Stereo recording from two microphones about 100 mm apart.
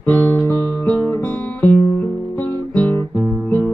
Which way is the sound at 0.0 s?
20° left (ahead or behind).